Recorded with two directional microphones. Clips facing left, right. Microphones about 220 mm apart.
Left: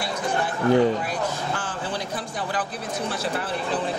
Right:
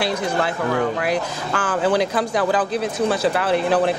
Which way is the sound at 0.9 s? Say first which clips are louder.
Right 4 dB; 90° right.